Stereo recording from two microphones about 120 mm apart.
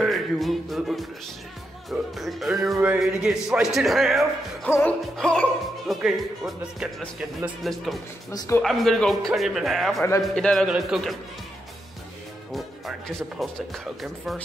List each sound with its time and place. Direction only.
0.0 s music: centre (ahead or behind)
1.9 s a man's voice: centre (ahead or behind)
4.6 s music: 20° left (ahead or behind)
5.1 s a man's voice: 5° left (ahead or behind)
6.8 s a man's voice: 5° right (ahead or behind)
8.3 s music: 30° left (ahead or behind)
8.6 s a man's voice: centre (ahead or behind)
13.4 s a man's voice: centre (ahead or behind)